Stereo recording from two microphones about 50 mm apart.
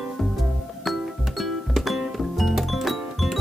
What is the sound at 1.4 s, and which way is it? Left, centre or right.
Music, centre.